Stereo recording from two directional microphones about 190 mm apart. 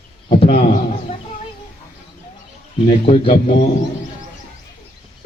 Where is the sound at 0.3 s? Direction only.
30° left (ahead or behind).